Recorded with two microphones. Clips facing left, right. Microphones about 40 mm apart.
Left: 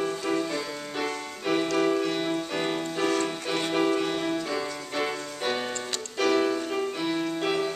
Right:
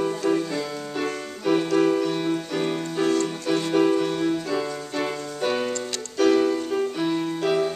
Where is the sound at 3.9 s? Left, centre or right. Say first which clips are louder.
Right 4 dB; left.